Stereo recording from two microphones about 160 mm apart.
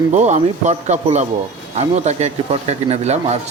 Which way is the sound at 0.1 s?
50° right (ahead or behind).